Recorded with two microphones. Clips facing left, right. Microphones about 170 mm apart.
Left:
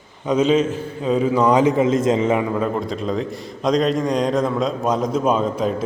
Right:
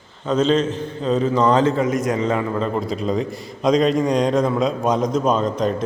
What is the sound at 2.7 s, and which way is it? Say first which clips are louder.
A man's voice: right 1 dB; centre (ahead or behind).